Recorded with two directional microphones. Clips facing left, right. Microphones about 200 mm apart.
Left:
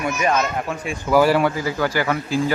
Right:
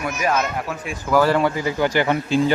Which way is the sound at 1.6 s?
20° right (ahead or behind).